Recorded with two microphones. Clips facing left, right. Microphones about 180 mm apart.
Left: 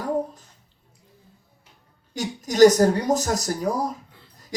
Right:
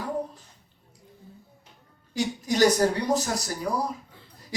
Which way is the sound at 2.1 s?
45° left (ahead or behind).